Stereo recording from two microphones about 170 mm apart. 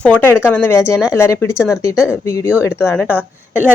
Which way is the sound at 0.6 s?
15° left (ahead or behind).